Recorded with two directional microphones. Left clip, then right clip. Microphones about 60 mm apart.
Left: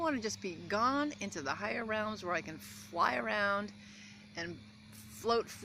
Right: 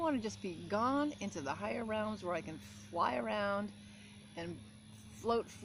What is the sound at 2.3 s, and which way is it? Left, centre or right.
Speech, right.